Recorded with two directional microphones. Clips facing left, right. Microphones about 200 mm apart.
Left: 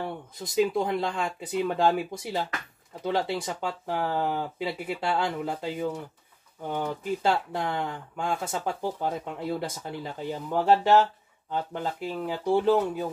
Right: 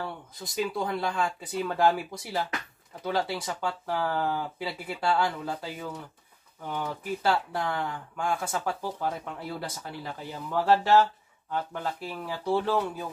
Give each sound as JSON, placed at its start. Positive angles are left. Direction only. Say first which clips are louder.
{"t": 0.0, "sound": "speech", "louder": "left 3 dB", "side_deg": 20}